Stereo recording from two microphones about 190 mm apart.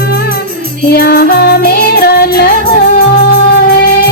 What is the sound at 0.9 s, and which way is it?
Music, 55° left (ahead or behind).